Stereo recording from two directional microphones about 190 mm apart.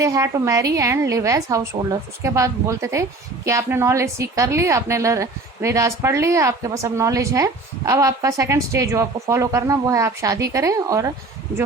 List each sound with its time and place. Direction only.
0.0 s a woman's voice: 15° right (ahead or behind)